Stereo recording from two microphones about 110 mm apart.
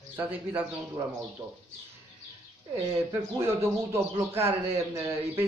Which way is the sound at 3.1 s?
25° right (ahead or behind).